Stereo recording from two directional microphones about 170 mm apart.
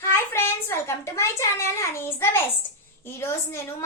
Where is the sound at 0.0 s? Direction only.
15° left (ahead or behind).